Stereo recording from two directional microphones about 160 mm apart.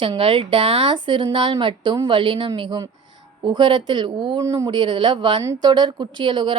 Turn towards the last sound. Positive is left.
turn(degrees=-30)  # may be behind; listen again after turning